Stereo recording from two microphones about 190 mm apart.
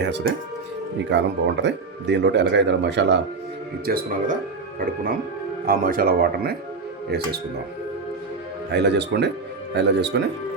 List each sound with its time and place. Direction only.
0.0 s speech: 65° right (ahead or behind)
3.8 s speech: 50° right (ahead or behind)
5.6 s speech: 50° right (ahead or behind)
8.7 s speech: 65° right (ahead or behind)